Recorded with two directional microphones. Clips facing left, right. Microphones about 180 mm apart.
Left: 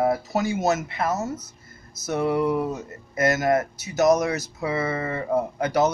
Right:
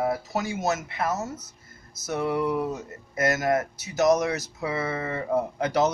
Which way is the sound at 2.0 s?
50° left (ahead or behind).